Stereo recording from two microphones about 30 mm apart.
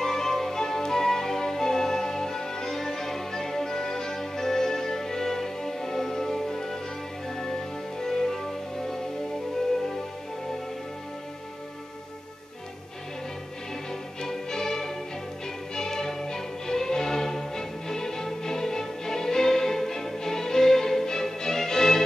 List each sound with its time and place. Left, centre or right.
0.0 s music: centre
14.2 s music: centre